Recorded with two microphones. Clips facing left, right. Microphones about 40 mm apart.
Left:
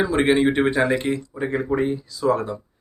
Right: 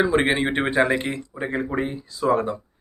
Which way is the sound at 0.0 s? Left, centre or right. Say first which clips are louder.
Left 2 dB; centre.